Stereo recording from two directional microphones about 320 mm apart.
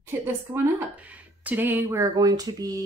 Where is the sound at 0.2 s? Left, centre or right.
Centre.